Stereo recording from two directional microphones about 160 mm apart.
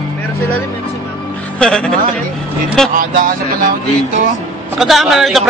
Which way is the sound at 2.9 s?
55° right (ahead or behind).